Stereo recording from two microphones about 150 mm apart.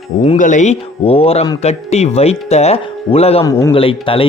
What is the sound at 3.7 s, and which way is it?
Speech, 35° left (ahead or behind).